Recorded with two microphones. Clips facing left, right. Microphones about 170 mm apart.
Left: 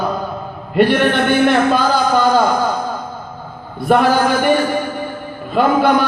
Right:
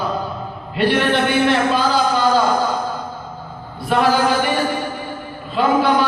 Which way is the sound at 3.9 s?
50° left (ahead or behind).